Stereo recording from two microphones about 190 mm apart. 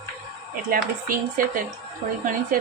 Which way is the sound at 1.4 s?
45° right (ahead or behind).